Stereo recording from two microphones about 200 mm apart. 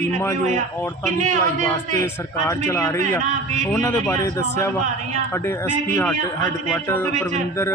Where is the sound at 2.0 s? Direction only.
15° left (ahead or behind).